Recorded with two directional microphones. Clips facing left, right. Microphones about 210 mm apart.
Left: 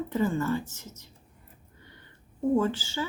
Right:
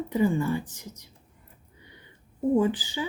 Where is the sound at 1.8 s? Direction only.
15° right (ahead or behind).